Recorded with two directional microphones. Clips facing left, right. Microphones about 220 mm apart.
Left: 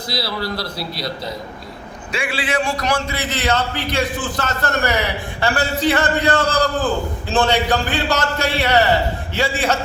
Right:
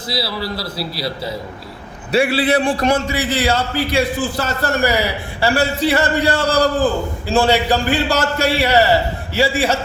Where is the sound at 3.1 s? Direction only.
10° right (ahead or behind).